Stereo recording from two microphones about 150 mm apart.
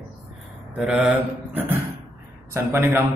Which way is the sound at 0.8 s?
5° right (ahead or behind).